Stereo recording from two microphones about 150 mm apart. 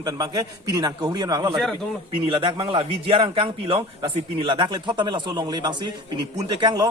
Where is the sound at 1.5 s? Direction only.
Centre (ahead or behind).